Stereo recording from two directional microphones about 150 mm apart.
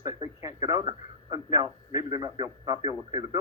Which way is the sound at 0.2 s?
25° right (ahead or behind).